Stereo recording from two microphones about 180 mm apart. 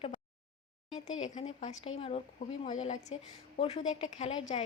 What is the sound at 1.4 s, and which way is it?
A woman's voice, 40° left (ahead or behind).